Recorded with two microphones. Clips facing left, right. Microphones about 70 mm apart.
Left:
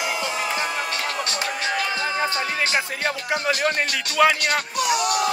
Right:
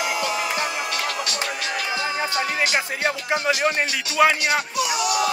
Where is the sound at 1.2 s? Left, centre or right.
Left.